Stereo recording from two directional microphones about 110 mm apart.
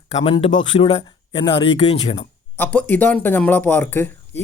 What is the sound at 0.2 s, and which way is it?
Speech, 55° left (ahead or behind).